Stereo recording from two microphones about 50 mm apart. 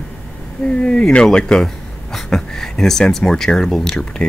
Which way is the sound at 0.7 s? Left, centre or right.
Centre.